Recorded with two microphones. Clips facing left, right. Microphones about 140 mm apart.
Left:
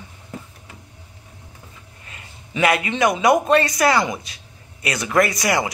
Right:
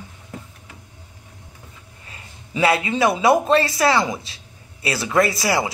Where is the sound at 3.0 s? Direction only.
30° right (ahead or behind).